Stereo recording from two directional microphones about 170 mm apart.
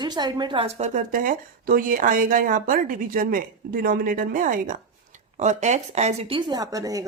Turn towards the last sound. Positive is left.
turn(degrees=-20)  # may be behind; listen again after turning